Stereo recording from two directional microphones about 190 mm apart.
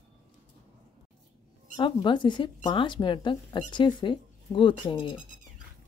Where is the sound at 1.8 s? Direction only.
25° left (ahead or behind).